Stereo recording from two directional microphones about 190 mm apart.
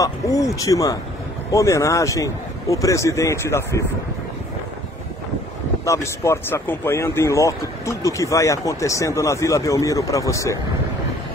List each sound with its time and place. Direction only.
0.0 s speech: 20° left (ahead or behind)
5.9 s speech: 15° left (ahead or behind)